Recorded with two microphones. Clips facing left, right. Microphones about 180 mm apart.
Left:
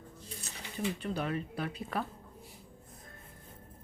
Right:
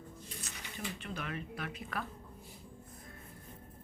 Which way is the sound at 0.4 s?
35° left (ahead or behind).